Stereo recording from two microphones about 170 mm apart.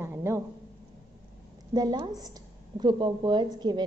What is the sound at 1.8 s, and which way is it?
A woman's voice, 25° right (ahead or behind).